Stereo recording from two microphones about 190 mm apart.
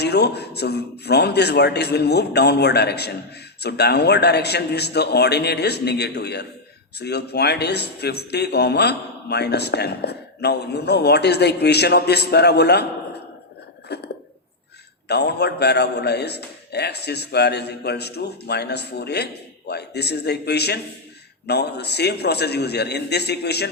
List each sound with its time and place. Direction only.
0.0 s a man's voice: 60° left (ahead or behind)
13.8 s a sound: 60° left (ahead or behind)
15.0 s a man's voice: 60° left (ahead or behind)